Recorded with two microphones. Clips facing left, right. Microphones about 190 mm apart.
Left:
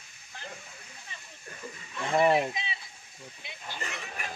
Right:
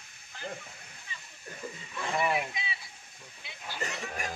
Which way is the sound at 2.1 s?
35° left (ahead or behind).